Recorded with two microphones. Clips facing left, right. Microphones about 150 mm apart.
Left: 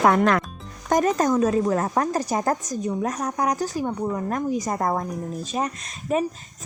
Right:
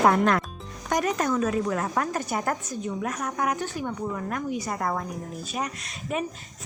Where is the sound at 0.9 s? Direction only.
40° left (ahead or behind).